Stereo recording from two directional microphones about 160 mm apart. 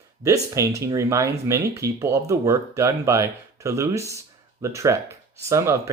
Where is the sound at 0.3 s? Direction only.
20° right (ahead or behind).